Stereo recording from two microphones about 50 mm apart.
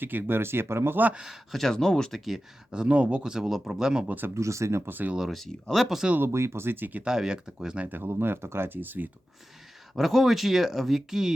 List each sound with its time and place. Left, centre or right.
0.0 s speech: right
1.1 s speech: centre
1.5 s speech: centre
2.1 s speech: centre
2.7 s speech: right
4.0 s speech: right
4.4 s speech: right
4.9 s speech: right
5.3 s speech: centre
6.1 s speech: right
7.0 s speech: centre
7.9 s speech: right
9.9 s speech: centre